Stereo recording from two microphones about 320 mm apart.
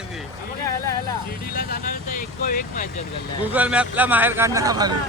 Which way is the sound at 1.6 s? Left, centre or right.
Left.